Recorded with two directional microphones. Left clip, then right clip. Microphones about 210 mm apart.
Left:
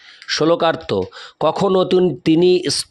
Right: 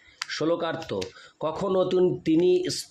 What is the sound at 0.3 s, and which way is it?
A man's voice, 45° left (ahead or behind).